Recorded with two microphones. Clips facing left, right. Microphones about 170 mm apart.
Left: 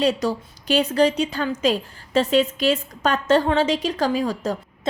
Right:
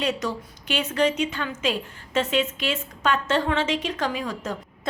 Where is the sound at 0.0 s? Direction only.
35° left (ahead or behind).